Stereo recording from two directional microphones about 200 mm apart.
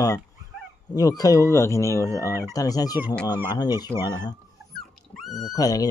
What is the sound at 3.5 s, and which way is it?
Speech, 20° left (ahead or behind).